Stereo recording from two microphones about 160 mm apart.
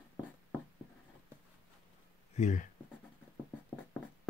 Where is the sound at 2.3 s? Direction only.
50° left (ahead or behind).